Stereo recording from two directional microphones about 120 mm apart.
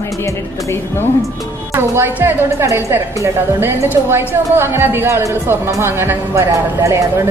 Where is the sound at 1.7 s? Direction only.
20° right (ahead or behind).